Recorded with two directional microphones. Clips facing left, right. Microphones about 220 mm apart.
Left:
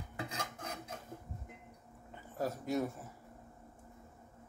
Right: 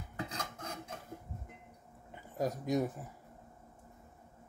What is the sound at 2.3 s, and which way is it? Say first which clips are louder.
Speech: right 3 dB; 15° right (ahead or behind).